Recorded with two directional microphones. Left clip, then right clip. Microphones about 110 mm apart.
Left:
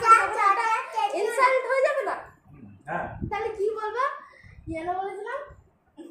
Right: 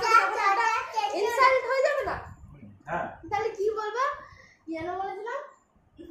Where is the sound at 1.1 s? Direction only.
15° right (ahead or behind).